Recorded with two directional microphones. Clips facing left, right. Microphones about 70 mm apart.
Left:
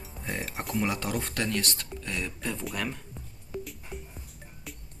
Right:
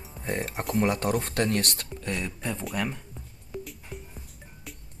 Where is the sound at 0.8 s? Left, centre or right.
Right.